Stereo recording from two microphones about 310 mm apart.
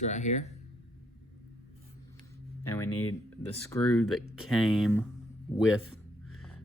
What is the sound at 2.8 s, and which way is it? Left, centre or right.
Speech, left.